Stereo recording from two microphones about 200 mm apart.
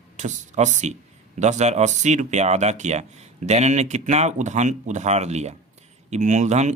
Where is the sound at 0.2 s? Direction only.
35° right (ahead or behind).